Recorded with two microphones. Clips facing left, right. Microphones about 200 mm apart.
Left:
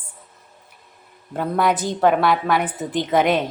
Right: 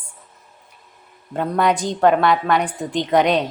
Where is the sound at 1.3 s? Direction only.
5° left (ahead or behind).